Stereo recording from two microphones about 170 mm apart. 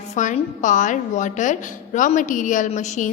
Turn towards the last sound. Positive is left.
turn(degrees=45)  # may be behind; listen again after turning